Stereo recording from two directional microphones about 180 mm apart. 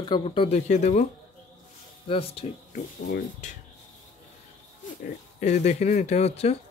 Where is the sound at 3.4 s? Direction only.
45° left (ahead or behind).